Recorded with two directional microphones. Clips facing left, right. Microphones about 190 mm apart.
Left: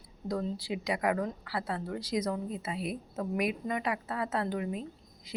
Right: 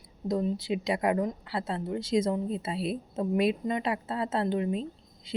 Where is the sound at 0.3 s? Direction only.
20° right (ahead or behind).